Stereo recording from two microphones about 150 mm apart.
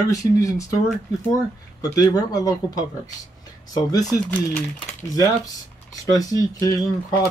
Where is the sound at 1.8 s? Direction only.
25° left (ahead or behind).